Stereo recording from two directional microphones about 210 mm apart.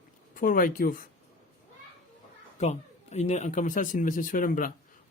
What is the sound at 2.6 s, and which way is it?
Speech, 30° left (ahead or behind).